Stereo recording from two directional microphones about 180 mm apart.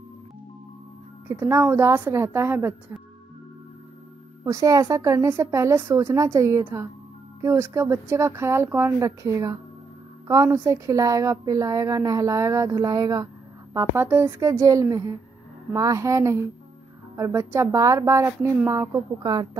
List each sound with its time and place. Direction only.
1.4 s a woman's voice: 15° right (ahead or behind)
4.5 s a woman's voice: 20° right (ahead or behind)